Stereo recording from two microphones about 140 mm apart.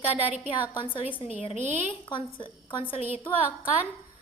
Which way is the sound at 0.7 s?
35° left (ahead or behind).